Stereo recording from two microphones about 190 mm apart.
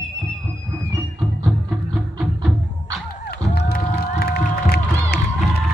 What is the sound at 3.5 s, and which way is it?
Crowd, 55° left (ahead or behind).